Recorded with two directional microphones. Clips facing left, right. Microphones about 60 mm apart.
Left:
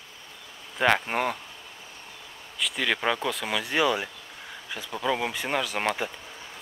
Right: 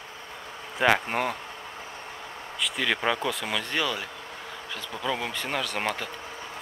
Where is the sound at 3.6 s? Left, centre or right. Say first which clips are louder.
Left 4 dB; centre.